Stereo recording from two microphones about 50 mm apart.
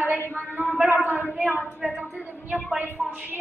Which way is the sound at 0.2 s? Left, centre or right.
Left.